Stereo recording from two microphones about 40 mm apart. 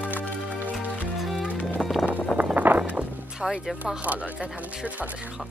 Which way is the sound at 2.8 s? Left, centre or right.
Right.